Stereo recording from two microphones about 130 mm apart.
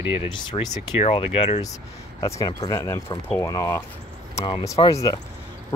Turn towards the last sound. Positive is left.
turn(degrees=25)  # may be behind; listen again after turning